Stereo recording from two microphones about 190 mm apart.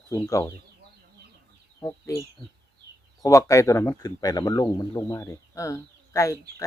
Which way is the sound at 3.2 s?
15° left (ahead or behind).